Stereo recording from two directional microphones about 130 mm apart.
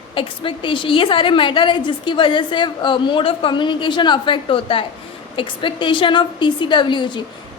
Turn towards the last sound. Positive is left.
turn(degrees=35)  # may be behind; listen again after turning